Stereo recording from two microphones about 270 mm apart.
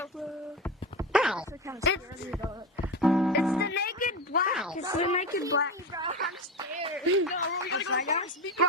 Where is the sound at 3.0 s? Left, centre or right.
Centre.